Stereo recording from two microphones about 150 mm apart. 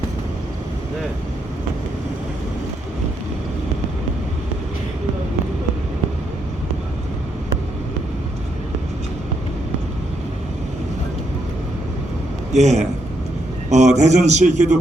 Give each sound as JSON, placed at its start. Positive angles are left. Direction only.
{"t": 12.5, "sound": "a man's voice", "side_deg": -50}